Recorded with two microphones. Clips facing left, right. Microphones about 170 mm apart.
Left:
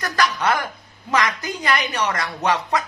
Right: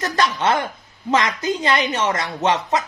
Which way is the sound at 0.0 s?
25° right (ahead or behind).